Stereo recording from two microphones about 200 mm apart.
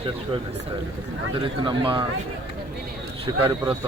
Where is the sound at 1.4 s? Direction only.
25° right (ahead or behind).